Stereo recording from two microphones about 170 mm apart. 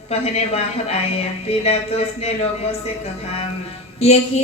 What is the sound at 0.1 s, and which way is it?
Speech, 40° left (ahead or behind).